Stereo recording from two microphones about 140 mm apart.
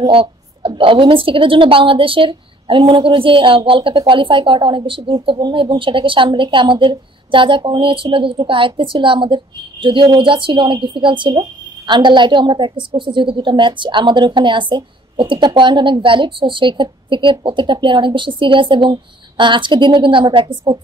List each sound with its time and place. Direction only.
0.0 s a woman's voice: 40° right (ahead or behind)